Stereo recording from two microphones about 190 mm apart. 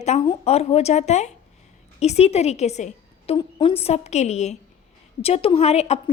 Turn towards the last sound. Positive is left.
turn(degrees=35)  # may be behind; listen again after turning